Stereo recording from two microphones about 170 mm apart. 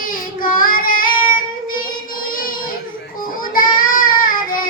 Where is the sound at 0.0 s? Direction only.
55° left (ahead or behind).